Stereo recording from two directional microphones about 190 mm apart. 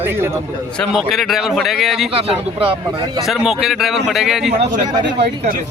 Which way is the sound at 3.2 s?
Centre (ahead or behind).